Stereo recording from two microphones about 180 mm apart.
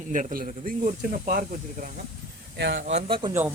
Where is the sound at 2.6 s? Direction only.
65° right (ahead or behind).